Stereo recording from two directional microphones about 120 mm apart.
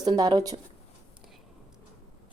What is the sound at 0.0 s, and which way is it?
Speech, 35° right (ahead or behind).